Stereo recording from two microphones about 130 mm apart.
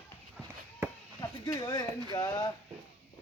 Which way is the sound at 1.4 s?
30° left (ahead or behind).